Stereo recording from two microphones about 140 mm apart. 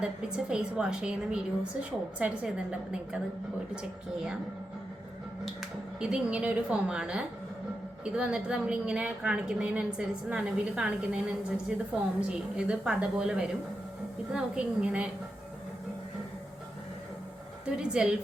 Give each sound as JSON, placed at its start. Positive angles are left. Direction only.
{"t": 0.0, "sound": "a woman's voice", "side_deg": -5}
{"t": 5.5, "sound": "a woman's voice", "side_deg": -5}
{"t": 17.7, "sound": "speech", "side_deg": -5}